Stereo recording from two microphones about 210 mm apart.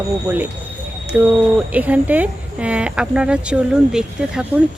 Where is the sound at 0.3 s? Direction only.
10° right (ahead or behind).